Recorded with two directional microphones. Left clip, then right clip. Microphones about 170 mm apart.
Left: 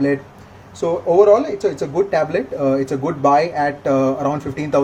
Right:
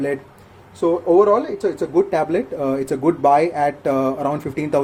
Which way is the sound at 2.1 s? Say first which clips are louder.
Left 1 dB; 40° right (ahead or behind).